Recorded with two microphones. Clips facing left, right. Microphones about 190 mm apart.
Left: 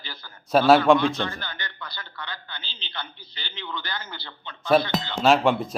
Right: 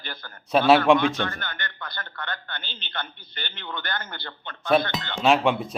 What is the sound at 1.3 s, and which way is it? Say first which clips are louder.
A man's voice: right 1 dB; 55° right (ahead or behind).